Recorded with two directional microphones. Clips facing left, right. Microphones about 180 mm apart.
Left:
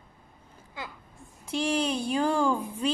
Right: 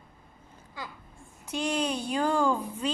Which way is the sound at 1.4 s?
10° left (ahead or behind).